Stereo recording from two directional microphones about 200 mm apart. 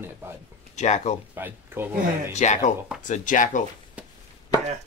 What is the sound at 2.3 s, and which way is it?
Speech, 35° left (ahead or behind).